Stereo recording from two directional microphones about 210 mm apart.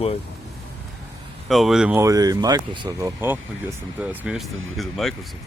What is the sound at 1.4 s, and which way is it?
Speech, centre (ahead or behind).